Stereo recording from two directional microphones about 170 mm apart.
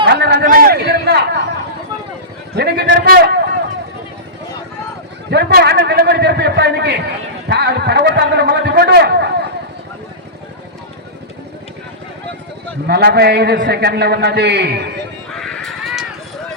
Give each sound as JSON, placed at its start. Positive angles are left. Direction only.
{"t": 0.0, "sound": "a sound", "side_deg": -75}
{"t": 0.4, "sound": "a man's voice", "side_deg": -60}
{"t": 2.6, "sound": "a man's voice", "side_deg": -90}
{"t": 5.3, "sound": "a man's voice", "side_deg": -70}
{"t": 12.9, "sound": "a man's voice", "side_deg": -70}
{"t": 15.4, "sound": "a sound", "side_deg": 5}